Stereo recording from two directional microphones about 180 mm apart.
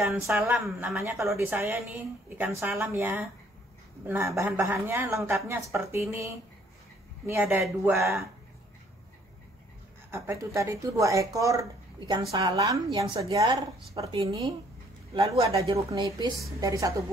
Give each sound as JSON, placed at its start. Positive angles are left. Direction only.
{"t": 0.1, "sound": "speech", "side_deg": -15}
{"t": 10.1, "sound": "a woman's voice", "side_deg": -15}
{"t": 13.9, "sound": "a woman's voice", "side_deg": -35}